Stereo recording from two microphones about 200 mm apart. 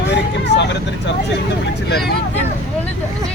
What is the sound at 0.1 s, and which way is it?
Vehicle, 60° left (ahead or behind).